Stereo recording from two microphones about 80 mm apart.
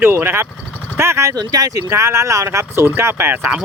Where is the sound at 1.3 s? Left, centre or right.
Right.